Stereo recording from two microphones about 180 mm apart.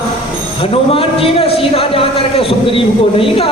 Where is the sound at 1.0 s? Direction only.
30° left (ahead or behind).